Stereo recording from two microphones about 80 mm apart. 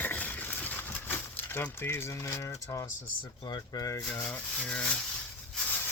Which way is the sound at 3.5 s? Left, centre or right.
Left.